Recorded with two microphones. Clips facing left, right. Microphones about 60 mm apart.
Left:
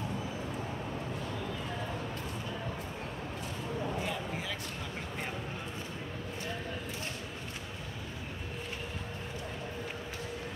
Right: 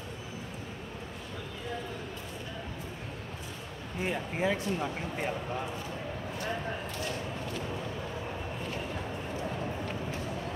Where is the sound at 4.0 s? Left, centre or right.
Right.